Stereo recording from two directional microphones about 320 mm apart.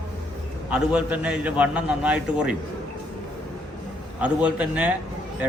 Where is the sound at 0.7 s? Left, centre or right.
Centre.